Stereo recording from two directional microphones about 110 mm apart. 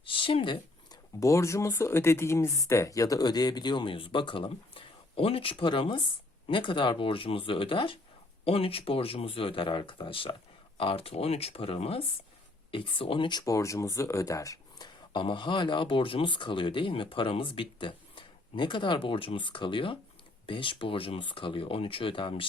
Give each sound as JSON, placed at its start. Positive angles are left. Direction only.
{"t": 0.0, "sound": "a sound", "side_deg": 55}
{"t": 1.2, "sound": "speech", "side_deg": 25}
{"t": 13.4, "sound": "speech", "side_deg": 30}
{"t": 15.1, "sound": "speech", "side_deg": 50}